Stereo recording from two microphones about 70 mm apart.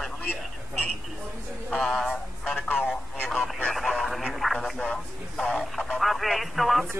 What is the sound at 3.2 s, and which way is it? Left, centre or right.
Speech, centre.